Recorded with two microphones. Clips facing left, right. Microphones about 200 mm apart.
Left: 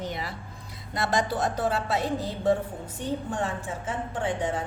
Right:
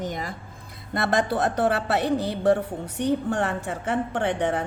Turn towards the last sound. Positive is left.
turn(degrees=-65)  # may be behind; listen again after turning